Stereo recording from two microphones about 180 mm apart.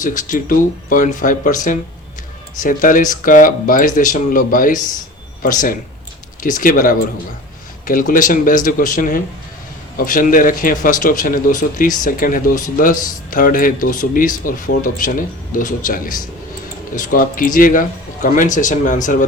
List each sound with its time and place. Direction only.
0.0 s speech: 45° left (ahead or behind)